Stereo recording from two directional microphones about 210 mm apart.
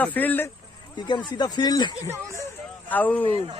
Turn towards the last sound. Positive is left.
turn(degrees=-25)  # may be behind; listen again after turning